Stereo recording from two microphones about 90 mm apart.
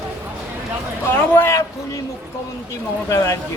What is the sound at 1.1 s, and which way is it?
Speech, 25° left (ahead or behind).